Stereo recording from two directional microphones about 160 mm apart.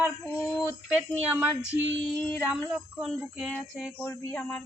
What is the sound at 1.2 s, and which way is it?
Speech, 10° right (ahead or behind).